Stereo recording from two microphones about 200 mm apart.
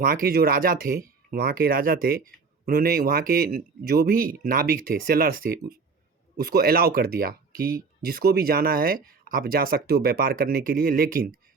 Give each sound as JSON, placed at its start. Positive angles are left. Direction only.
{"t": 0.0, "sound": "speech", "side_deg": -45}